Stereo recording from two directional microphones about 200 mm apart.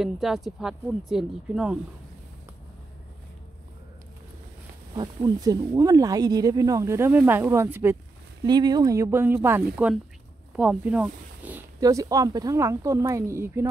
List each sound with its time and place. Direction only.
0.0 s speech: centre (ahead or behind)
4.9 s speech: 20° right (ahead or behind)